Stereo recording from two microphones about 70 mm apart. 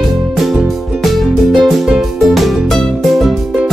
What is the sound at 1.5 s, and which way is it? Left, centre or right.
Music, centre.